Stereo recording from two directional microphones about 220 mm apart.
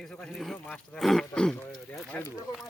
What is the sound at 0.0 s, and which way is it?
Speech, centre (ahead or behind).